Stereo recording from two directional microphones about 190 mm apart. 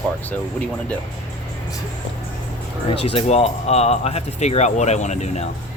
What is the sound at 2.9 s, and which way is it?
Speech, 30° left (ahead or behind).